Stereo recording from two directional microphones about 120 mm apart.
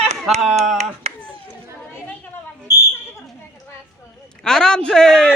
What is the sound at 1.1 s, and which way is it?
Chop, 60° right (ahead or behind).